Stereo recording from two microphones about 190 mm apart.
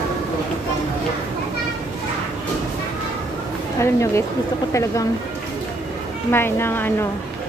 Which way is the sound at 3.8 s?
15° left (ahead or behind).